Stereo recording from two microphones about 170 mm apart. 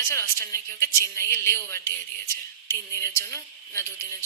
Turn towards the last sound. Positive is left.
turn(degrees=15)  # may be behind; listen again after turning